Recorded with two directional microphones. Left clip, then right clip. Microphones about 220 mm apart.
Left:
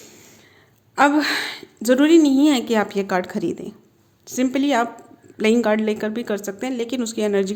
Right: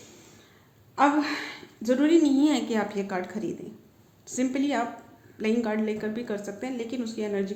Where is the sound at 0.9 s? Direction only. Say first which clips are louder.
Left 6 dB; 45° left (ahead or behind).